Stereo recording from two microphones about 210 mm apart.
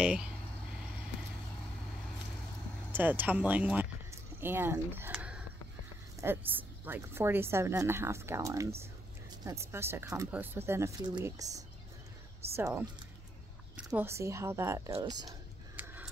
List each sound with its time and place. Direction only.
0.0 s speech: 5° right (ahead or behind)
2.9 s a sound: 10° right (ahead or behind)
6.2 s speech: 10° right (ahead or behind)
14.9 s whispering: 20° right (ahead or behind)